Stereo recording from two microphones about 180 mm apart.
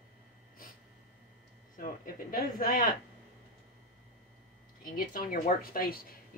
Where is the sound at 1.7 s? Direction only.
50° left (ahead or behind).